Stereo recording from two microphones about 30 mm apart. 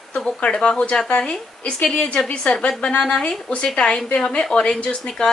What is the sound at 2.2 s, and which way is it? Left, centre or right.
A woman's voice, left.